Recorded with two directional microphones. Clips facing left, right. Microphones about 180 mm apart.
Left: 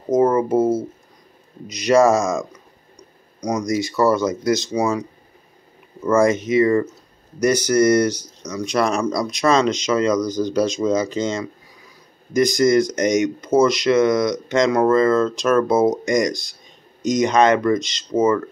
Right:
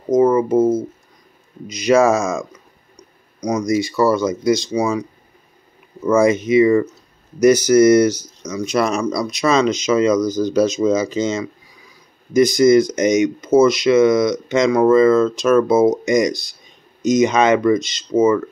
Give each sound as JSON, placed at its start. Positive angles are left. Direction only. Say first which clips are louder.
{"t": 1.7, "sound": "speech", "louder": "right 1 dB", "side_deg": 0}
{"t": 3.4, "sound": "speech", "louder": "right 3 dB", "side_deg": 0}
{"t": 6.0, "sound": "speech", "louder": "right 2 dB", "side_deg": 0}